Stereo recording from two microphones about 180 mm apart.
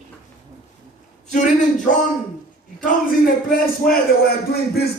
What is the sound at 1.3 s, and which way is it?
Speech, 45° left (ahead or behind).